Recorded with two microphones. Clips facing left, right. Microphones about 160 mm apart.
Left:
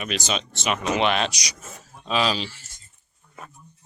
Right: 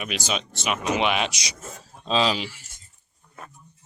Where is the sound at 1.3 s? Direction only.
25° right (ahead or behind).